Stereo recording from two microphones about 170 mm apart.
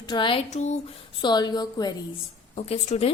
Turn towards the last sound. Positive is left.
turn(degrees=40)  # may be behind; listen again after turning